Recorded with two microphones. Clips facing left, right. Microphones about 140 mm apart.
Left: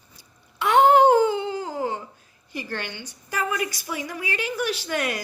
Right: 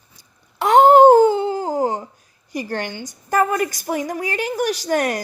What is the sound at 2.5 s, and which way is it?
A woman's voice, 40° right (ahead or behind).